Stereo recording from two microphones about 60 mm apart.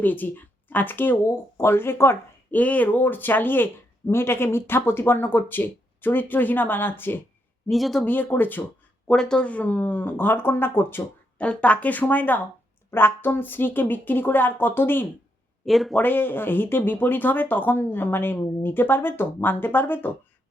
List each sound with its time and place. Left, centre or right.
0.0 s speech: left
2.5 s speech: left
7.7 s speech: centre
8.0 s speech: left
9.0 s speech: centre
9.5 s speech: left
11.3 s speech: left
15.6 s speech: centre
16.0 s speech: left